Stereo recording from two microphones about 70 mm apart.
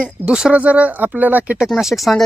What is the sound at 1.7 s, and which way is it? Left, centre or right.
Speech, centre.